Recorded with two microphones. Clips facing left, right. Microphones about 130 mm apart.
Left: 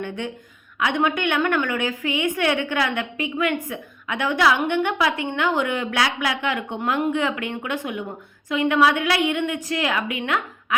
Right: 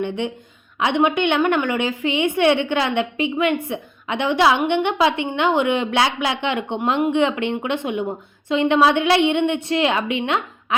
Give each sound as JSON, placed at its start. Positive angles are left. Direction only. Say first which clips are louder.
{"t": 0.0, "sound": "a woman's voice", "louder": "right 5 dB", "side_deg": -20}